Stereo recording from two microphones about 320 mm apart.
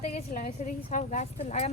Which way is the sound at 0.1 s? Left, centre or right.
Left.